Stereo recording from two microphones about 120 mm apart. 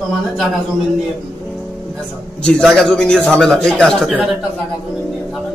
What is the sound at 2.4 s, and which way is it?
Speech, 5° left (ahead or behind).